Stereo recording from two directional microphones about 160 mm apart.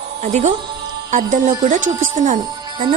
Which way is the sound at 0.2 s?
45° right (ahead or behind).